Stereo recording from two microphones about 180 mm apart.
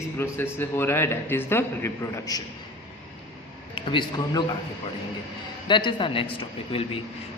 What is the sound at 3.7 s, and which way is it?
Speech, 25° left (ahead or behind).